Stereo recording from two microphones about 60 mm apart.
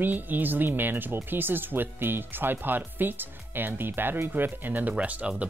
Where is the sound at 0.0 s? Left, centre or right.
Right.